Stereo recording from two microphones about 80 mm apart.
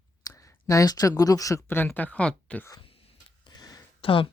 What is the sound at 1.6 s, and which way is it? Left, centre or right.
Speech, left.